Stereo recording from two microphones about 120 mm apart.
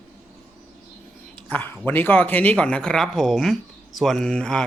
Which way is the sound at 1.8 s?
15° left (ahead or behind).